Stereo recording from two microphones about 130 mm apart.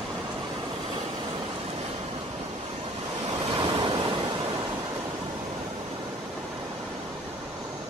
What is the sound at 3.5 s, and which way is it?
Waves, 40° right (ahead or behind).